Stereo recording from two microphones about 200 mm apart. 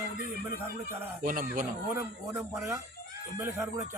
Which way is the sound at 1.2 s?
45° right (ahead or behind).